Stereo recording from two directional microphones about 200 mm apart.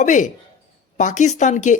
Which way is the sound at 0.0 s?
40° left (ahead or behind).